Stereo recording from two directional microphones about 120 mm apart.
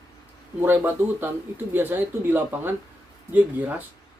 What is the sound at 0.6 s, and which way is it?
Speech, 20° right (ahead or behind).